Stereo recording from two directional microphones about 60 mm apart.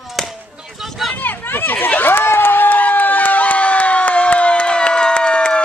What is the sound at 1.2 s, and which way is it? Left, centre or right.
Run, left.